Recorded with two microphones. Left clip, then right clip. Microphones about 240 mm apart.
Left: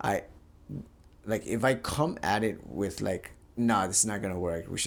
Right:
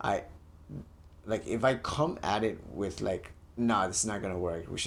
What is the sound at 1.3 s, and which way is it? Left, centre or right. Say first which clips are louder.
Speech: left 1 dB; left.